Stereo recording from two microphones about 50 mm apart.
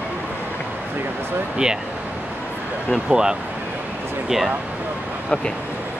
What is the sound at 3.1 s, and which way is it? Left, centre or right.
Speech, centre.